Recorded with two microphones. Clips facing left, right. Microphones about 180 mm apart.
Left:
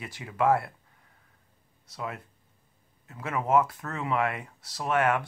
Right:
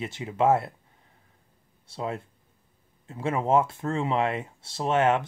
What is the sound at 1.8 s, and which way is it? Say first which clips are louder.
Speech: right 5 dB; 30° right (ahead or behind).